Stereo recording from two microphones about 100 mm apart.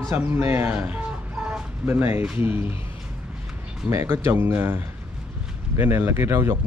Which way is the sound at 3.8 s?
25° right (ahead or behind).